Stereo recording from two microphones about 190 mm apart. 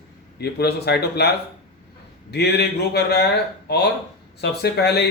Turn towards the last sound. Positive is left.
turn(degrees=60)  # may be behind; listen again after turning